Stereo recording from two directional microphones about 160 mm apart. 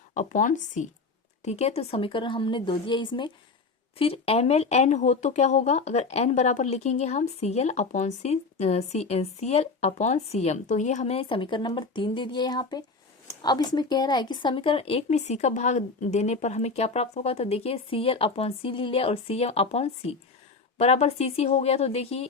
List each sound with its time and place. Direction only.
0.1 s speech: 50° left (ahead or behind)